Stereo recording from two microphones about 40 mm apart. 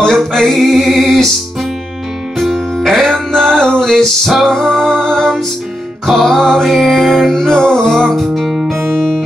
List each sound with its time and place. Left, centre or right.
0.0 s music: centre